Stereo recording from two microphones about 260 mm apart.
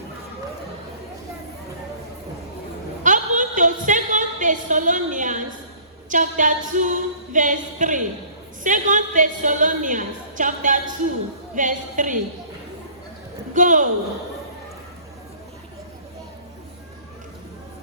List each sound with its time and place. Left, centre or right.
3.0 s a sound: right
6.1 s a woman's voice: right
13.5 s a woman's voice: right